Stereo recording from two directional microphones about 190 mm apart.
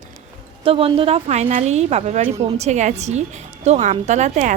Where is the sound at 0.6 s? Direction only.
30° right (ahead or behind).